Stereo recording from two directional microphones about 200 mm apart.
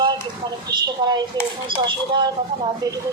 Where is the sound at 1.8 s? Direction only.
25° right (ahead or behind).